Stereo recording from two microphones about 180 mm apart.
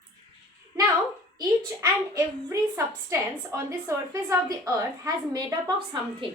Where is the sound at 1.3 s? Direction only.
20° right (ahead or behind).